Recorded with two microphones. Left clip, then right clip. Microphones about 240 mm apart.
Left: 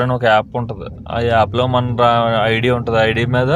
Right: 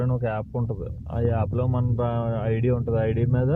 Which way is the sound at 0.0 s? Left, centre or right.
Left.